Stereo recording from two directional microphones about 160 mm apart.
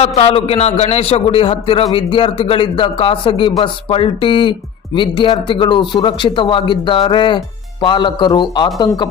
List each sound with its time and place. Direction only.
0.0 s a man's voice: 40° left (ahead or behind)